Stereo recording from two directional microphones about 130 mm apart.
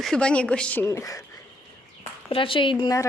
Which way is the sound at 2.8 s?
25° left (ahead or behind).